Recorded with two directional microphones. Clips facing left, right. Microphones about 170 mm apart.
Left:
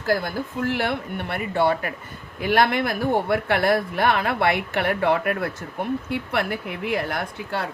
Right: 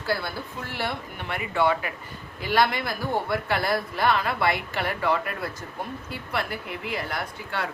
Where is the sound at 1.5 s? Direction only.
35° left (ahead or behind).